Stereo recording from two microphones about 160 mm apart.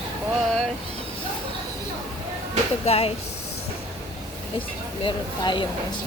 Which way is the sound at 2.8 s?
40° left (ahead or behind).